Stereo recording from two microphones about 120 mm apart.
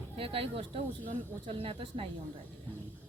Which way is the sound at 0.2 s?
50° right (ahead or behind).